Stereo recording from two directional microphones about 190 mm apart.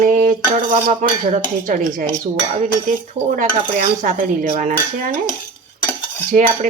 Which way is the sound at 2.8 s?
45° right (ahead or behind).